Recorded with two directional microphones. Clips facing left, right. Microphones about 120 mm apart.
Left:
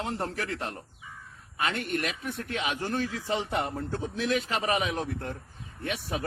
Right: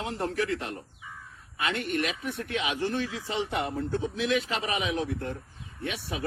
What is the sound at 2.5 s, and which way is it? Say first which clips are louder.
Speech: right 1 dB; 45° left (ahead or behind).